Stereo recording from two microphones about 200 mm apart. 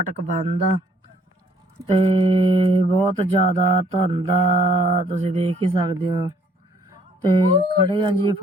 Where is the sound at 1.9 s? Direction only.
25° right (ahead or behind).